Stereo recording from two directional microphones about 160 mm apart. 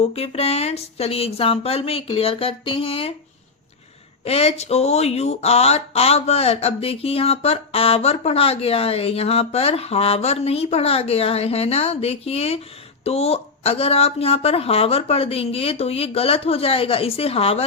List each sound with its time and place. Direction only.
0.0 s speech: 40° left (ahead or behind)
4.2 s speech: 40° left (ahead or behind)